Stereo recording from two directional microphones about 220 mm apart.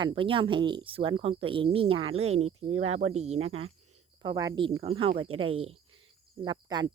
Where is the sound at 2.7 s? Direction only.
75° right (ahead or behind).